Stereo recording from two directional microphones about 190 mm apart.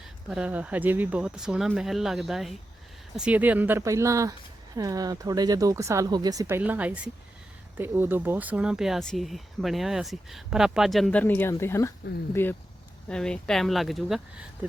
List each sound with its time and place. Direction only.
0.0 s speech: 5° right (ahead or behind)
6.6 s speech: 5° right (ahead or behind)